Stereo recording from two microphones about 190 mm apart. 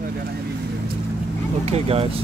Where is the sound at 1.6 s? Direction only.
30° right (ahead or behind).